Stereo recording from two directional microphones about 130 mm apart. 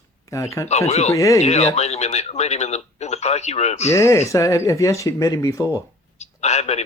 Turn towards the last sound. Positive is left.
turn(degrees=55)  # may be behind; listen again after turning